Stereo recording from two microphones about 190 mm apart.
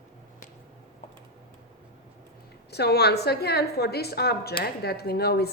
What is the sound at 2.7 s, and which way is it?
A woman's voice, 60° left (ahead or behind).